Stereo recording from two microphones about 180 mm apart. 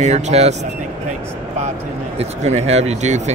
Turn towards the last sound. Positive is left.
turn(degrees=-40)  # may be behind; listen again after turning